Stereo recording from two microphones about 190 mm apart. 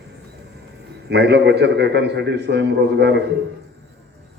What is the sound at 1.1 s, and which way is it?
A man's voice, 65° right (ahead or behind).